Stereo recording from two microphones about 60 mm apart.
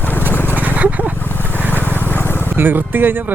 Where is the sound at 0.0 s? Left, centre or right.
Left.